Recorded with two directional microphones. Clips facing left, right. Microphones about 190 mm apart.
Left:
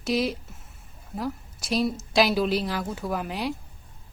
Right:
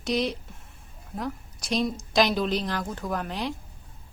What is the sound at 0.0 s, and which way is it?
A woman's voice, 5° left (ahead or behind).